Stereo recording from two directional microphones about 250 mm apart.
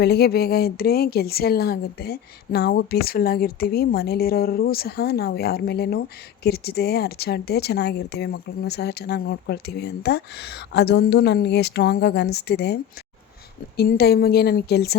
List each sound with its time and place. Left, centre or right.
0.0 s a woman's voice: left